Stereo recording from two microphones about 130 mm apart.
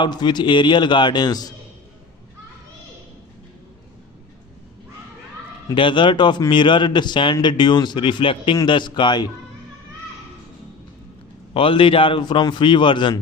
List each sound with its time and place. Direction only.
0.0 s a man's voice: 35° left (ahead or behind)
5.7 s a man's voice: 40° left (ahead or behind)
11.5 s a man's voice: 45° left (ahead or behind)